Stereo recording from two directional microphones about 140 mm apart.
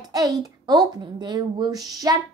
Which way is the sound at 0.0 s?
25° right (ahead or behind).